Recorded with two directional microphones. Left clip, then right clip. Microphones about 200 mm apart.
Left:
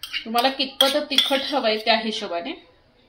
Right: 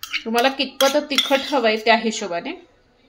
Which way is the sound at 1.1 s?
40° right (ahead or behind).